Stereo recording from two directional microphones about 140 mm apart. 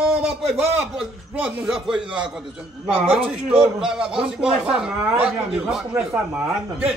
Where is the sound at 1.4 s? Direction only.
5° right (ahead or behind).